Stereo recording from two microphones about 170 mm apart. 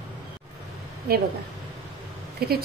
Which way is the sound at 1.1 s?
65° right (ahead or behind).